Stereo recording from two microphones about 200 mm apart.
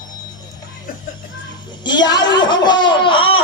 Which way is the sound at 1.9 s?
20° left (ahead or behind).